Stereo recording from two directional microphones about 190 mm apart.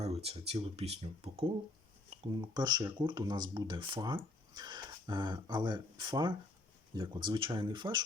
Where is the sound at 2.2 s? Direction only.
20° right (ahead or behind).